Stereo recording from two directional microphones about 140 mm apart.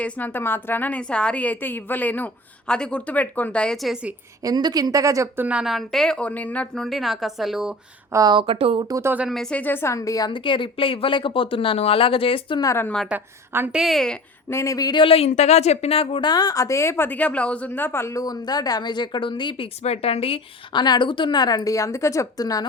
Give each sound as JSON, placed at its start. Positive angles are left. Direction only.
{"t": 0.0, "sound": "a woman's voice", "side_deg": 15}
{"t": 4.4, "sound": "speech", "side_deg": -30}
{"t": 5.5, "sound": "a woman's voice", "side_deg": -5}
{"t": 8.1, "sound": "speech", "side_deg": -30}
{"t": 8.9, "sound": "speech", "side_deg": -20}
{"t": 9.1, "sound": "a woman's voice", "side_deg": 0}
{"t": 12.6, "sound": "a woman's voice", "side_deg": 20}
{"t": 13.1, "sound": "a woman's voice", "side_deg": -15}
{"t": 13.7, "sound": "a woman's voice", "side_deg": 0}
{"t": 14.5, "sound": "a woman's voice", "side_deg": 20}